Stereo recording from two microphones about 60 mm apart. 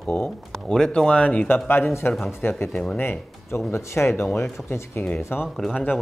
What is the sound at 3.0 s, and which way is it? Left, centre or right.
Speech, left.